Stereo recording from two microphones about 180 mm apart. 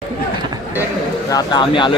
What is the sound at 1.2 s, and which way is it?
Speech, 20° left (ahead or behind).